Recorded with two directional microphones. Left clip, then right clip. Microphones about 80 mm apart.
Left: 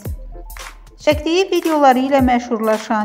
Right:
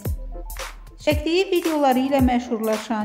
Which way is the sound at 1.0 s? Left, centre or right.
Left.